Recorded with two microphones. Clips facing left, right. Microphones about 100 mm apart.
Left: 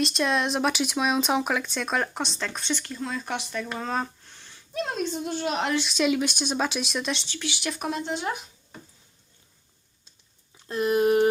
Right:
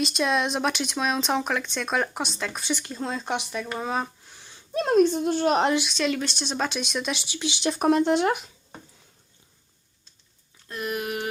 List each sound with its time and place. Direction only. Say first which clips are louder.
0.0 s speech: right 1 dB; centre (ahead or behind)
2.7 s speech: right 1 dB; 20° right (ahead or behind)
3.8 s a sound: right 2 dB; 10° right (ahead or behind)
4.8 s a woman's voice: right 9 dB; 45° right (ahead or behind)
5.8 s speech: left 2 dB; 5° left (ahead or behind)
7.3 s speech: right 5 dB; 20° right (ahead or behind)
7.8 s speech: right 12 dB; 50° right (ahead or behind); by 8.4 s 70° right (ahead or behind)
10.7 s a sound: left 9 dB; 30° left (ahead or behind)